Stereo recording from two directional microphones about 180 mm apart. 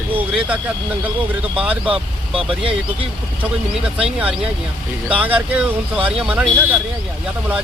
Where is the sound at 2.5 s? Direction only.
30° right (ahead or behind).